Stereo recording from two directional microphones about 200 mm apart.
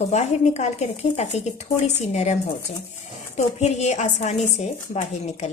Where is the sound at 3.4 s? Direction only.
35° left (ahead or behind).